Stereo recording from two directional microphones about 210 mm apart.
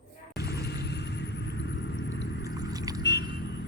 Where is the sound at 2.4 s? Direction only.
15° right (ahead or behind).